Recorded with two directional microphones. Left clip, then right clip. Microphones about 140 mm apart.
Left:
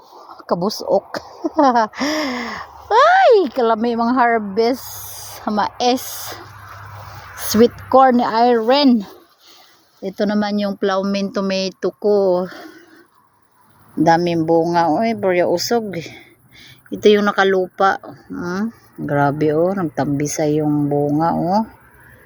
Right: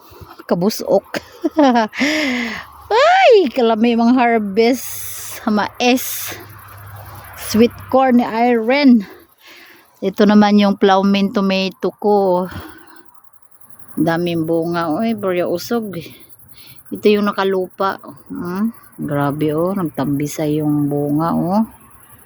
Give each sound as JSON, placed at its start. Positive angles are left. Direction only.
{"t": 0.3, "sound": "speech", "side_deg": -50}
{"t": 7.3, "sound": "speech", "side_deg": 0}
{"t": 8.9, "sound": "speech", "side_deg": -20}
{"t": 10.0, "sound": "speech", "side_deg": -60}
{"t": 14.0, "sound": "speech", "side_deg": 10}